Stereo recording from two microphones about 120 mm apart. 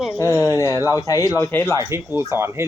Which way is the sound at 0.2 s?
25° left (ahead or behind).